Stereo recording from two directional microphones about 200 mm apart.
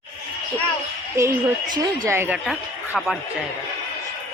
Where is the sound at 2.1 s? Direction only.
10° right (ahead or behind).